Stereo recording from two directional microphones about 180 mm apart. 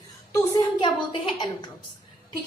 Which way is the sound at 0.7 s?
25° left (ahead or behind).